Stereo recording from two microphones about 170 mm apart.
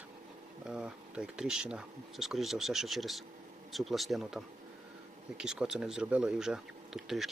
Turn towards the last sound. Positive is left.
turn(degrees=0)  # may be behind; listen again after turning